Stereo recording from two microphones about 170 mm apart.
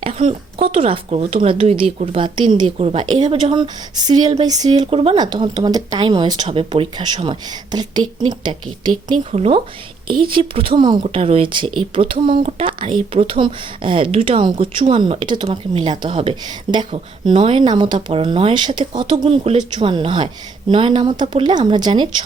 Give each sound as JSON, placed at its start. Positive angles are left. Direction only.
{"t": 0.0, "sound": "a woman's voice", "side_deg": -35}
{"t": 9.3, "sound": "speech", "side_deg": -35}
{"t": 11.0, "sound": "speech", "side_deg": -35}